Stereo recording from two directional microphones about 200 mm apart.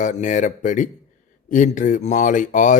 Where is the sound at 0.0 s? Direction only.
40° left (ahead or behind).